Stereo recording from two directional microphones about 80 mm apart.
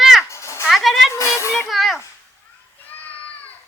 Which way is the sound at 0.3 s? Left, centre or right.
Left.